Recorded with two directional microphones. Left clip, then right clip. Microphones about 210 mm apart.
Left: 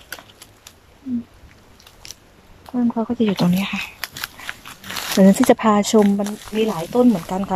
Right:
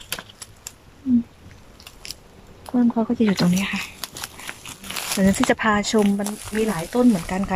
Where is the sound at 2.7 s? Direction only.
10° left (ahead or behind).